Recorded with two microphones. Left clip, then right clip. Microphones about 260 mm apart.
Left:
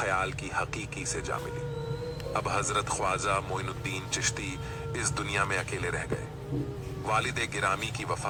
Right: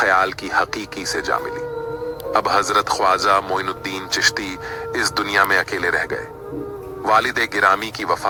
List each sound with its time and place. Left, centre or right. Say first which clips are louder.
0.0 s speech: right 13 dB; right